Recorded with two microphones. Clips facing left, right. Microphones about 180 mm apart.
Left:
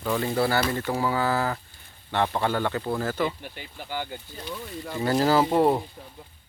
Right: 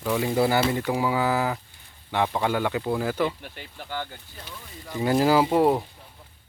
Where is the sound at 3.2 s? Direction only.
Centre (ahead or behind).